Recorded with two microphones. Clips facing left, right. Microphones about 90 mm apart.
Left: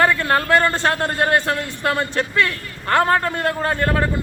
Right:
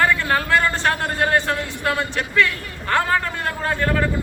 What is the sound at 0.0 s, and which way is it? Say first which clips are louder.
Speech: left 2 dB; 40° left (ahead or behind).